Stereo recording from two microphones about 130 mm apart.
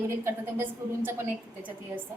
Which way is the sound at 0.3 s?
15° right (ahead or behind).